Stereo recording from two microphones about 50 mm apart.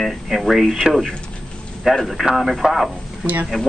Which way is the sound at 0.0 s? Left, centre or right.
Centre.